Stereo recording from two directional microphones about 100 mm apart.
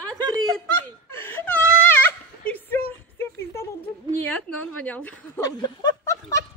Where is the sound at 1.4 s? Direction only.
15° left (ahead or behind).